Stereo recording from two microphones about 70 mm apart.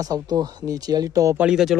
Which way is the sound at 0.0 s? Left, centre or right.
Right.